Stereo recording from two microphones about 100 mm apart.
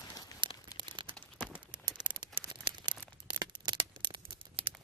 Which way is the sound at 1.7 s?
50° right (ahead or behind).